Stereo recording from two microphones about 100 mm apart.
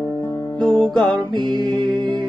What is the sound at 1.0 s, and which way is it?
Music, 50° right (ahead or behind).